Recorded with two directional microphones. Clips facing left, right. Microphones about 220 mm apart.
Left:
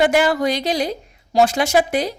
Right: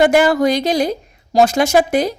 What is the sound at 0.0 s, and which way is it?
A woman's voice, 45° right (ahead or behind).